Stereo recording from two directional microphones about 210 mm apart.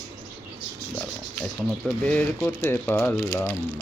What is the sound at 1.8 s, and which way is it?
Speech, 5° left (ahead or behind).